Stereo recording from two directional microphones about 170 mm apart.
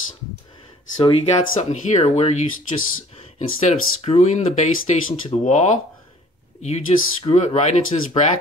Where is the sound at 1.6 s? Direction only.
45° left (ahead or behind).